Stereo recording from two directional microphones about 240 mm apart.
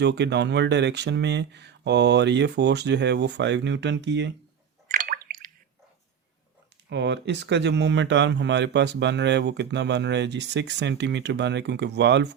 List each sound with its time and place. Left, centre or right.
0.0 s speech: right
4.9 s drip: right
6.9 s speech: right